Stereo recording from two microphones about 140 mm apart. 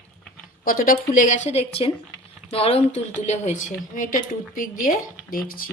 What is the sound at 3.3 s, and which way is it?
Speech, 60° left (ahead or behind).